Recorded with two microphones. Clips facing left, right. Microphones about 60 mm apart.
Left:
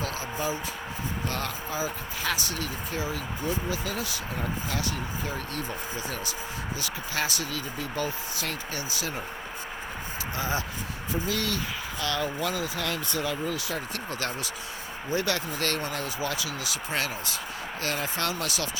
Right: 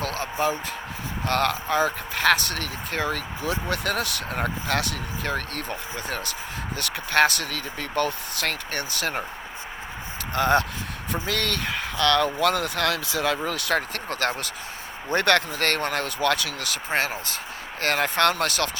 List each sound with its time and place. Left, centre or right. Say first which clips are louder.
0.0 s a sound: right 5 dB; right
1.3 s speech: right 14 dB; right
10.3 s speech: right 10 dB; right
13.9 s speech: right 5 dB; right
16.9 s speech: right 6 dB; right